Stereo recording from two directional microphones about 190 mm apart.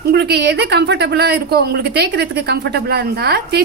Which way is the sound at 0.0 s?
55° right (ahead or behind).